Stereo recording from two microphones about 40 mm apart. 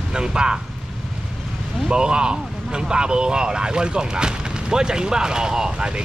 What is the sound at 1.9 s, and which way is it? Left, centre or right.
Speech, right.